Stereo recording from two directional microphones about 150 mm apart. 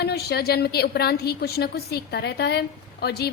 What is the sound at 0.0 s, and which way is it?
A woman's voice, 90° left.